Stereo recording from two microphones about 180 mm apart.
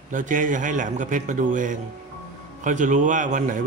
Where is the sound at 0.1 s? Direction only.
45° right (ahead or behind).